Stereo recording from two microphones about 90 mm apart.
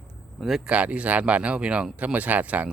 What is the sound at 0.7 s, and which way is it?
Speech, 15° right (ahead or behind).